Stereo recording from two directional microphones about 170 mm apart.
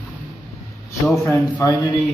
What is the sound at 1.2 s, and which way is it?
Speech, 15° left (ahead or behind).